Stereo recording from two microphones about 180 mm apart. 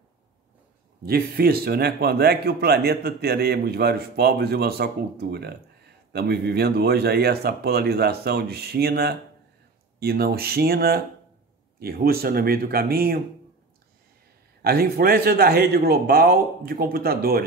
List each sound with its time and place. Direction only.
1.0 s speech: 55° right (ahead or behind)
14.6 s speech: 55° right (ahead or behind)